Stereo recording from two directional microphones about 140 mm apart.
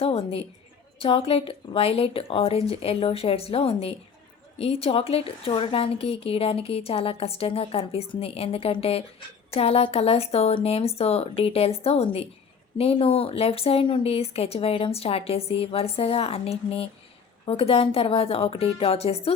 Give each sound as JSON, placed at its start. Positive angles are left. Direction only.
{"t": 0.0, "sound": "a woman's voice", "side_deg": 45}